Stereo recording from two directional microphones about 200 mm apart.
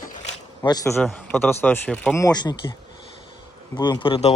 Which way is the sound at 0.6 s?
20° left (ahead or behind).